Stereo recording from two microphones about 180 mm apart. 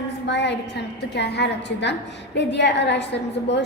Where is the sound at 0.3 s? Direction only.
75° left (ahead or behind).